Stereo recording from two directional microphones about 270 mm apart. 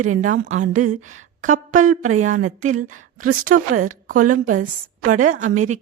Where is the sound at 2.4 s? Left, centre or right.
Right.